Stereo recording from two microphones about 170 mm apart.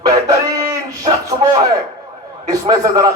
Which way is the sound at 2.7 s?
20° right (ahead or behind).